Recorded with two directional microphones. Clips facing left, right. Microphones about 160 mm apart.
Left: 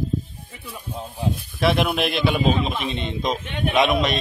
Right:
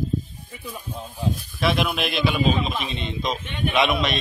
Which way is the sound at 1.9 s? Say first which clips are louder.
Left 2 dB; 55° left (ahead or behind).